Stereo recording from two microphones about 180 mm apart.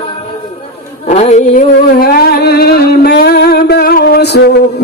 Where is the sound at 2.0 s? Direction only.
55° left (ahead or behind).